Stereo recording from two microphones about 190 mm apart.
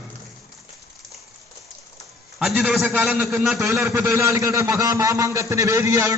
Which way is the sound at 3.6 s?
15° right (ahead or behind).